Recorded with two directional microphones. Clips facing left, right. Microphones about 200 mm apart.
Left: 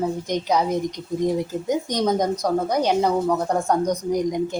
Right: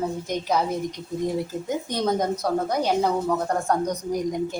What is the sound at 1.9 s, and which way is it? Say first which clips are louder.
Speech: left 1 dB; 15° left (ahead or behind).